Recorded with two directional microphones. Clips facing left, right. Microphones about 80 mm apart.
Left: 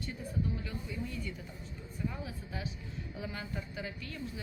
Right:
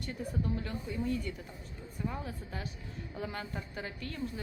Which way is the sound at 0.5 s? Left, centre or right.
Right.